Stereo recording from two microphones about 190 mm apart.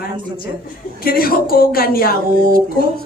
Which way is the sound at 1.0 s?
50° left (ahead or behind).